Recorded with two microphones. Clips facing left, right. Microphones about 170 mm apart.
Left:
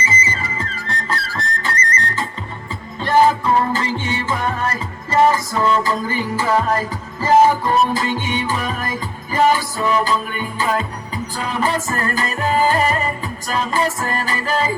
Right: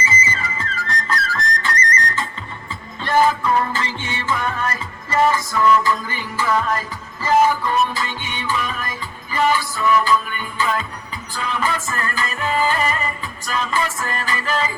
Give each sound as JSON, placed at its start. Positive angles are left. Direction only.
{"t": 0.0, "sound": "music", "side_deg": 30}